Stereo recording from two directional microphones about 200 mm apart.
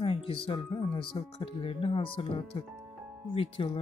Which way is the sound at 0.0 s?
25° left (ahead or behind).